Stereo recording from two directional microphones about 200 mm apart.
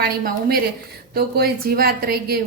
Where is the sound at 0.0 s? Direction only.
50° right (ahead or behind).